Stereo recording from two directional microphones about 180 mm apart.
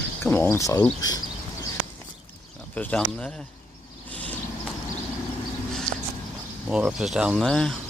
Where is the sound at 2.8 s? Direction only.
5° left (ahead or behind).